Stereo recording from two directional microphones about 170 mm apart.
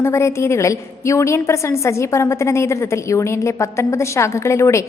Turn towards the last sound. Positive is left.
turn(degrees=15)  # may be behind; listen again after turning